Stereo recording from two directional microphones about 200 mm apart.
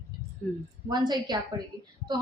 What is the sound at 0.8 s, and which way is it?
Speech, 20° right (ahead or behind).